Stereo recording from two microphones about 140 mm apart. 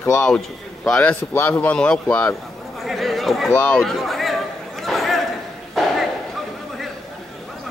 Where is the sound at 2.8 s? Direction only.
Centre (ahead or behind).